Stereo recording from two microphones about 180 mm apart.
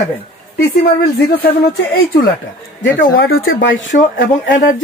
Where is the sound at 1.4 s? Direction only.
55° left (ahead or behind).